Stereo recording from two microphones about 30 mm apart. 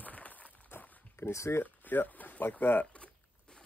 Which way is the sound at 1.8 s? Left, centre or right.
Left.